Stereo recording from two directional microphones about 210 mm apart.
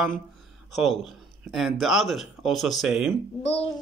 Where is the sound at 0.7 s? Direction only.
Centre (ahead or behind).